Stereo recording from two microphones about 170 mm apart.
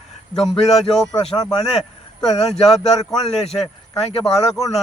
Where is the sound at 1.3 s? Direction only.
25° left (ahead or behind).